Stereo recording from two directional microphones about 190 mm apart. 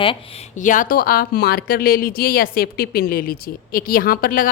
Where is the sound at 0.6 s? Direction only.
45° left (ahead or behind).